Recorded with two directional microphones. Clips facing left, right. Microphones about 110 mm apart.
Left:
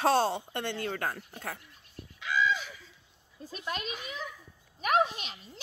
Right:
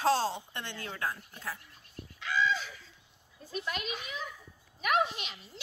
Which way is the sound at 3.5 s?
35° left (ahead or behind).